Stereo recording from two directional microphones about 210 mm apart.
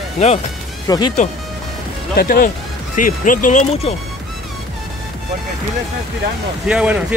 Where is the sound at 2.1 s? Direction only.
45° left (ahead or behind).